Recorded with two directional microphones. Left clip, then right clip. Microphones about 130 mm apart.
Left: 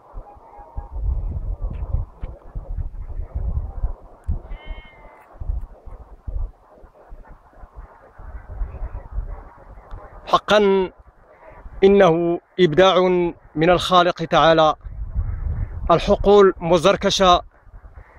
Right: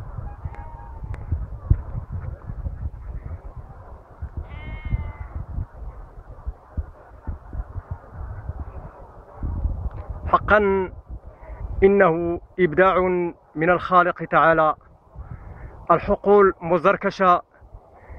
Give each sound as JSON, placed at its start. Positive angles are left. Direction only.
{"t": 4.5, "sound": "sheep", "side_deg": 45}
{"t": 9.8, "sound": "a sound", "side_deg": 50}
{"t": 11.8, "sound": "speech", "side_deg": 50}
{"t": 15.9, "sound": "speech", "side_deg": 50}